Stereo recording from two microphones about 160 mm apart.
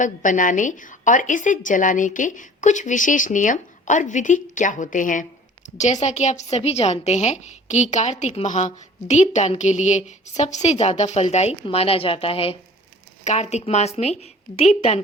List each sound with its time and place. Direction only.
0.0 s a woman's voice: 55° left (ahead or behind)